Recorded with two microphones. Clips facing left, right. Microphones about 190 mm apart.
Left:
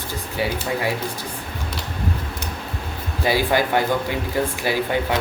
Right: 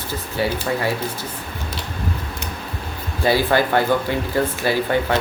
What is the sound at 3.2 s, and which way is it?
Speech, 15° left (ahead or behind).